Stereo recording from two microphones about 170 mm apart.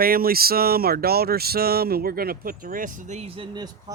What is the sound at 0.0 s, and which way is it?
Speech, 60° right (ahead or behind).